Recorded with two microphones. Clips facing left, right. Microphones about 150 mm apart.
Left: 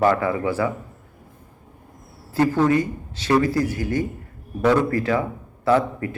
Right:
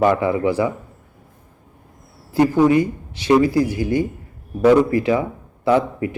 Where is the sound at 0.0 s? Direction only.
20° right (ahead or behind).